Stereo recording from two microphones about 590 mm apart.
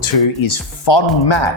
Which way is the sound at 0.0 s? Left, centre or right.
Left.